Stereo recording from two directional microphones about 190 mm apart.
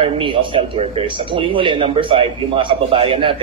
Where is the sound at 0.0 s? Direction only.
25° right (ahead or behind).